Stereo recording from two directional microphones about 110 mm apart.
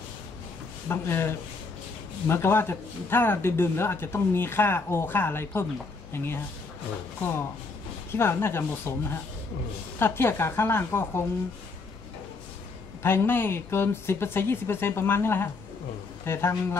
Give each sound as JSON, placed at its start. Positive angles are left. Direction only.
{"t": 0.8, "sound": "a man's voice", "side_deg": 20}
{"t": 13.0, "sound": "a man's voice", "side_deg": 20}